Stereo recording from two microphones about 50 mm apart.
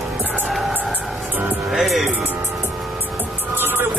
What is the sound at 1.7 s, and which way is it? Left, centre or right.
Music, centre.